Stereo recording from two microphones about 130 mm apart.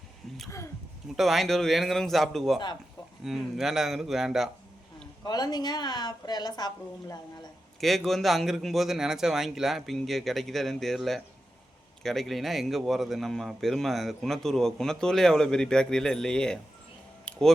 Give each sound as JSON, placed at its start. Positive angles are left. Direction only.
{"t": 1.1, "sound": "a man's voice", "side_deg": 0}
{"t": 5.2, "sound": "a woman's voice", "side_deg": 30}
{"t": 7.8, "sound": "a man's voice", "side_deg": 0}